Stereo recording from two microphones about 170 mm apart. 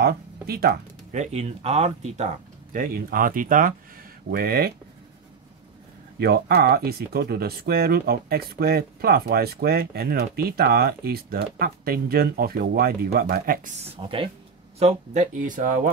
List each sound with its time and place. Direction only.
0.0 s speech: 65° right (ahead or behind)
1.1 s speech: 40° right (ahead or behind)
2.7 s speech: 55° right (ahead or behind)
4.3 s speech: 65° right (ahead or behind)
6.1 s speech: 70° right (ahead or behind)
14.0 s speech: 30° right (ahead or behind)
14.8 s speech: 40° right (ahead or behind)